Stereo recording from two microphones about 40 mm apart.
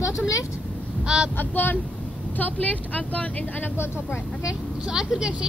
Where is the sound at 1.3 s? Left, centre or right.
Left.